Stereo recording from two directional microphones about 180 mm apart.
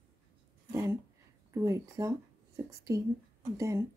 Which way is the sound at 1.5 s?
15° right (ahead or behind).